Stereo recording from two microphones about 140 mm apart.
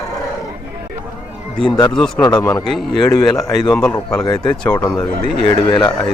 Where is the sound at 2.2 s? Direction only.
30° left (ahead or behind).